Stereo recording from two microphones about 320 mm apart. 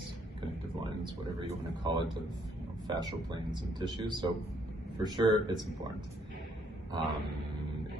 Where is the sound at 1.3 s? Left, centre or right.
Centre.